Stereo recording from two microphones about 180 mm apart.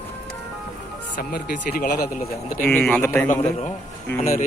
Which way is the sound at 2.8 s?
10° left (ahead or behind).